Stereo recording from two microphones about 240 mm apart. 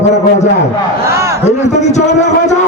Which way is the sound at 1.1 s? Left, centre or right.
Centre.